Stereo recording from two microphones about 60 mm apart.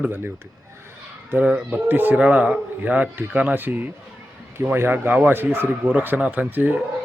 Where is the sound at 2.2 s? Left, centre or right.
Right.